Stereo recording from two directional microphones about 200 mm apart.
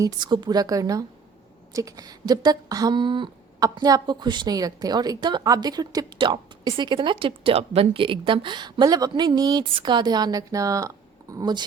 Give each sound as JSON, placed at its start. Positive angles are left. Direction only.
{"t": 0.0, "sound": "speech", "side_deg": -20}